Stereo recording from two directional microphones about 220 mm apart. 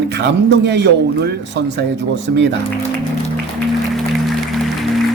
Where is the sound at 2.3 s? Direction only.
45° right (ahead or behind).